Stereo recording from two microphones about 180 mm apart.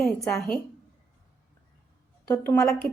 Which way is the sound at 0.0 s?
Centre (ahead or behind).